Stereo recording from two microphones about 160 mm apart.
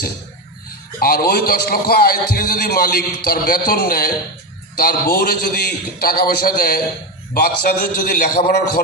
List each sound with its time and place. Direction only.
0.9 s a man's voice: 65° left (ahead or behind)